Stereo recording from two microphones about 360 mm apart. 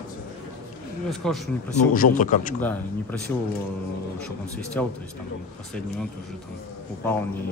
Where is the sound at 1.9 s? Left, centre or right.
Left.